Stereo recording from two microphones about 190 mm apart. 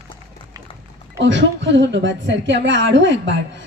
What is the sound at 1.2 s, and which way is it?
A woman's voice, 70° right (ahead or behind).